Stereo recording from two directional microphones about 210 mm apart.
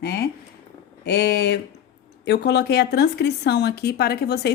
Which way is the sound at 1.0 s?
50° left (ahead or behind).